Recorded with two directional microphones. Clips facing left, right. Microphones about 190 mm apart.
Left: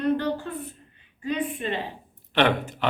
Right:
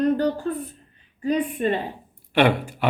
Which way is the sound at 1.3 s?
45° right (ahead or behind).